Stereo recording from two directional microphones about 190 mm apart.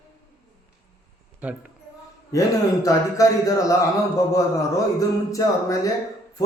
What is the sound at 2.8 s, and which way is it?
Speech, 20° left (ahead or behind).